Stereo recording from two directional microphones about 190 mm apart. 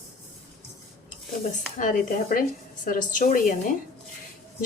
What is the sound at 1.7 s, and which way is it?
Speech, 45° left (ahead or behind).